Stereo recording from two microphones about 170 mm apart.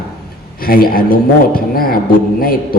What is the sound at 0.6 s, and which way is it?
A man's voice, 60° left (ahead or behind).